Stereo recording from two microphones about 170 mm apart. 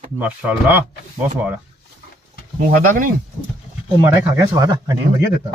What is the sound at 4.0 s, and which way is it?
Speech, 15° right (ahead or behind).